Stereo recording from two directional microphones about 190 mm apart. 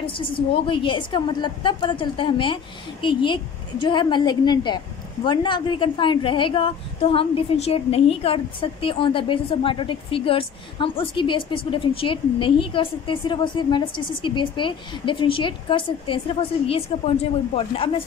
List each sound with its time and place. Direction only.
0.0 s a woman's voice: 25° left (ahead or behind)